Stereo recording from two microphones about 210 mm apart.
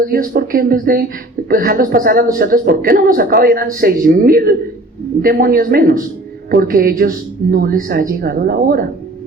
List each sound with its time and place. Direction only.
0.0 s a man's voice: 45° right (ahead or behind)